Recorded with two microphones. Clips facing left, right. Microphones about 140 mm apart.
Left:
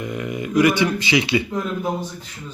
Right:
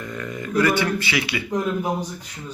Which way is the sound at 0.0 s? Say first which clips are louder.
Left 4 dB; 15° left (ahead or behind).